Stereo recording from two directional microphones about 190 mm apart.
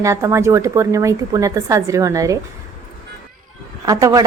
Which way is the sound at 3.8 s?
15° right (ahead or behind).